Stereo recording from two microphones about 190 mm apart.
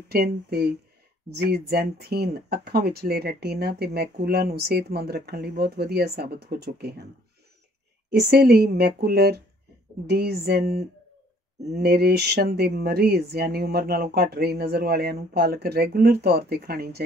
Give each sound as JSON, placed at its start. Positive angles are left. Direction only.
{"t": 0.1, "sound": "speech", "side_deg": -55}
{"t": 8.1, "sound": "speech", "side_deg": -55}